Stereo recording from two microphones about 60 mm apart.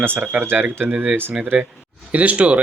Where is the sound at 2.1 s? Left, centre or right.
Right.